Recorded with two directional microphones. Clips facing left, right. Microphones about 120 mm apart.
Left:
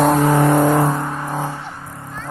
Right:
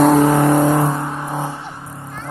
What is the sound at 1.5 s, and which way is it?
Vehicle, 15° right (ahead or behind).